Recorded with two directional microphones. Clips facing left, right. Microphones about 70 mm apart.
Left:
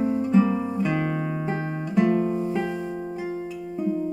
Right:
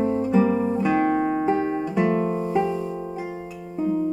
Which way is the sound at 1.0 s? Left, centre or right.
Right.